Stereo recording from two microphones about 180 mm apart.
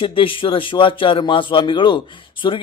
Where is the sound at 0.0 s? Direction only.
30° left (ahead or behind).